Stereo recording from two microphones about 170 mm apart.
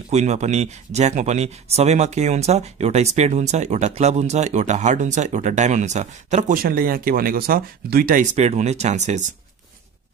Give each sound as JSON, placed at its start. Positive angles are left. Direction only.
{"t": 0.1, "sound": "speech", "side_deg": -40}
{"t": 8.4, "sound": "speech", "side_deg": -40}